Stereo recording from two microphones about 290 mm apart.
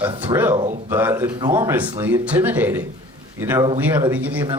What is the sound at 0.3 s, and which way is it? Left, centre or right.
Speech, centre.